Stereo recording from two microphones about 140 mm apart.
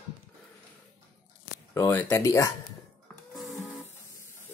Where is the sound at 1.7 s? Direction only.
15° left (ahead or behind).